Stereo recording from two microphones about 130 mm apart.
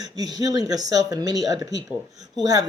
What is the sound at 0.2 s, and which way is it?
Speech, 30° right (ahead or behind).